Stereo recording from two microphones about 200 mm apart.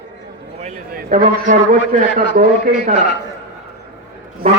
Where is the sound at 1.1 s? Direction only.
45° right (ahead or behind).